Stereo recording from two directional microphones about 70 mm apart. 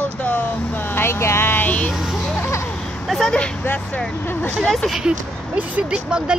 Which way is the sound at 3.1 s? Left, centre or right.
Centre.